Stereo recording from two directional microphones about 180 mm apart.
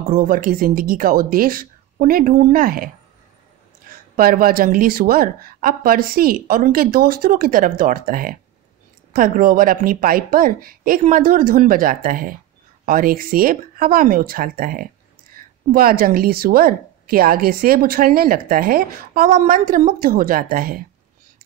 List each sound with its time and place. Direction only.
0.1 s a woman's voice: 50° right (ahead or behind)
4.2 s a woman's voice: 50° right (ahead or behind)